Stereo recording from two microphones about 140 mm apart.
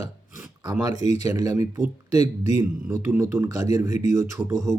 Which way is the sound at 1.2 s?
25° right (ahead or behind).